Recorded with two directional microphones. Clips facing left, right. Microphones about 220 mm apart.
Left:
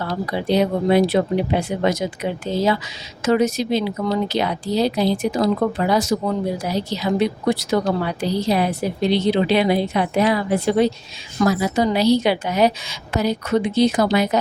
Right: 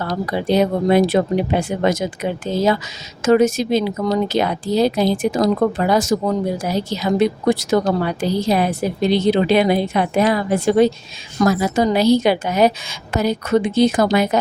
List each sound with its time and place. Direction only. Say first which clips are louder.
0.1 s a woman's voice: right 2 dB; 45° right (ahead or behind)